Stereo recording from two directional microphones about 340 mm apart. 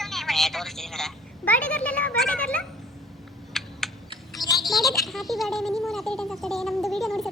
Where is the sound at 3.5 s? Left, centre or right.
Centre.